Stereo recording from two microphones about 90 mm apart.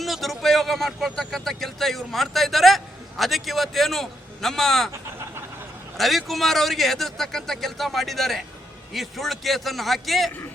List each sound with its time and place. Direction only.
0.0 s speech: centre (ahead or behind)
4.9 s vehicle: 35° right (ahead or behind)
6.0 s a man's voice: centre (ahead or behind)